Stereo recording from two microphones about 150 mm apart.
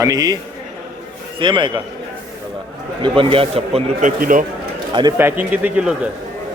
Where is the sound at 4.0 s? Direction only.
65° right (ahead or behind).